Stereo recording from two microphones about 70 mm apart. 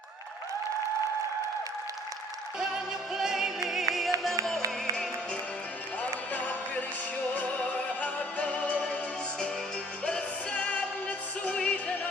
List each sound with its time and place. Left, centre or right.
2.6 s music: centre
6.3 s music: left
10.1 s music: centre